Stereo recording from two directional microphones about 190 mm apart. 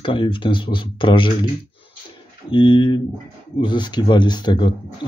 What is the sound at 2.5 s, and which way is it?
Speech, 25° left (ahead or behind).